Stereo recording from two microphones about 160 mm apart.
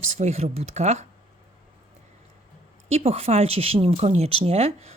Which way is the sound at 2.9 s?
40° right (ahead or behind).